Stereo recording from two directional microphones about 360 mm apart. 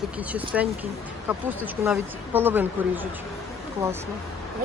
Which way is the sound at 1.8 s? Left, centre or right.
Centre.